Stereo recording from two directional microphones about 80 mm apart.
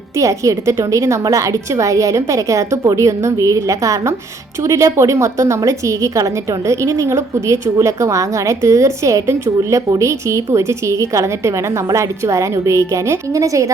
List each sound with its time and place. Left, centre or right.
0.2 s a woman's voice: right